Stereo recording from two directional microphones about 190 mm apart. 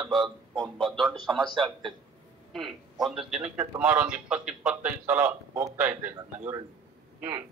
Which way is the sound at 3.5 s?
10° right (ahead or behind).